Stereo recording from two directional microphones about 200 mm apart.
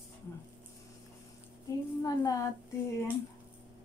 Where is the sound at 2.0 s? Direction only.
20° left (ahead or behind).